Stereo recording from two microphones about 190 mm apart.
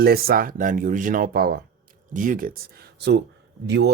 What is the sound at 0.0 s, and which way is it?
Speech, 55° right (ahead or behind).